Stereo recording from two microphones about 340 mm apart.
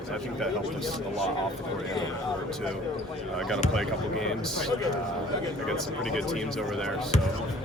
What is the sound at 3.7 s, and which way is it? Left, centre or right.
Speech, centre.